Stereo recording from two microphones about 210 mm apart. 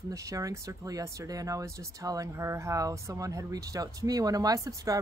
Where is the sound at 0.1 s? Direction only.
15° right (ahead or behind).